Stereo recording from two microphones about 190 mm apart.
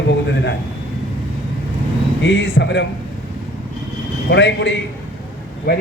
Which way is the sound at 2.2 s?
70° left (ahead or behind).